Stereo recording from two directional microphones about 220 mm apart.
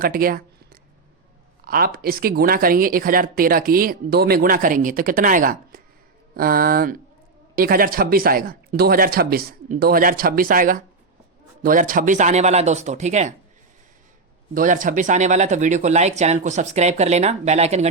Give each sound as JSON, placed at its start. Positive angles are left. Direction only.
{"t": 0.0, "sound": "a sound", "side_deg": -40}
{"t": 1.6, "sound": "speech", "side_deg": -40}
{"t": 14.5, "sound": "speech", "side_deg": -35}